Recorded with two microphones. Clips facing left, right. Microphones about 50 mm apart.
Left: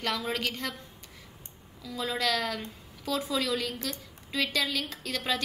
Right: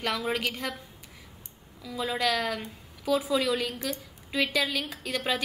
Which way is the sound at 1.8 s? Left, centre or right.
Centre.